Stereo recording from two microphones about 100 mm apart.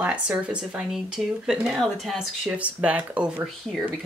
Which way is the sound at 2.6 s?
15° right (ahead or behind).